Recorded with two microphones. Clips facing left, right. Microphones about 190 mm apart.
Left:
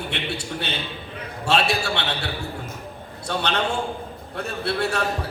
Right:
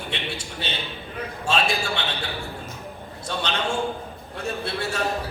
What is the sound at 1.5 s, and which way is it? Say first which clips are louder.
Speech: left 2 dB; 65° left (ahead or behind).